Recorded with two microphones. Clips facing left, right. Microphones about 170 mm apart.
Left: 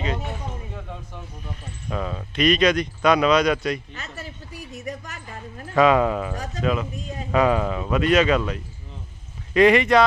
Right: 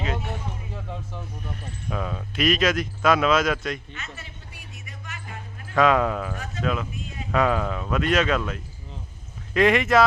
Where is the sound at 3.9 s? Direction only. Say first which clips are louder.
Left 4 dB; 35° left (ahead or behind).